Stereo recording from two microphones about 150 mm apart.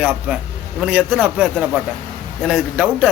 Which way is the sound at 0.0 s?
5° right (ahead or behind).